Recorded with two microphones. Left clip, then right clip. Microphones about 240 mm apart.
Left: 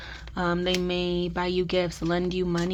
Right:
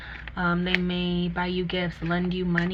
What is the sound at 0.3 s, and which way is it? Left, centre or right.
Speech, left.